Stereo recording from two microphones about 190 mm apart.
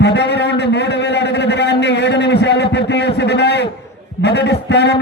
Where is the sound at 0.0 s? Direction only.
65° left (ahead or behind).